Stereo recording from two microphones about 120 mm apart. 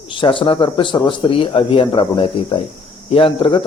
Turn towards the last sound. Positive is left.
turn(degrees=45)  # may be behind; listen again after turning